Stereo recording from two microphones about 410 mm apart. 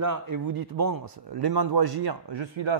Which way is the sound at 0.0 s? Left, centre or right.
Right.